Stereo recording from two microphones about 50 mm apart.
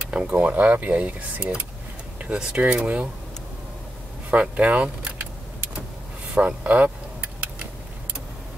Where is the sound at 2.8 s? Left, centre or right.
Right.